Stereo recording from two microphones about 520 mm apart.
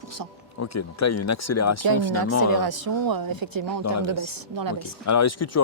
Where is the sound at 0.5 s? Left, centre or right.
Left.